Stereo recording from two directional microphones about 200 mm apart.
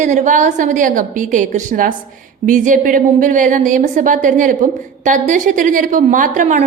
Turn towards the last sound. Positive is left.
turn(degrees=-40)  # may be behind; listen again after turning